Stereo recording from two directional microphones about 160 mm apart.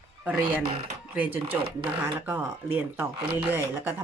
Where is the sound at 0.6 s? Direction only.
35° right (ahead or behind).